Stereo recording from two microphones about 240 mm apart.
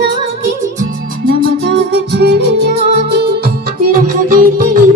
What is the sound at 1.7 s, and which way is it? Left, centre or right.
Music, right.